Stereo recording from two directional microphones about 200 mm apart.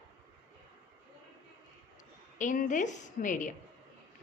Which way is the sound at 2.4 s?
40° left (ahead or behind).